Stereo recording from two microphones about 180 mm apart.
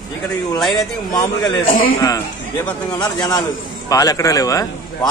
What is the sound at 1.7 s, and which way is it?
Speech, 50° left (ahead or behind).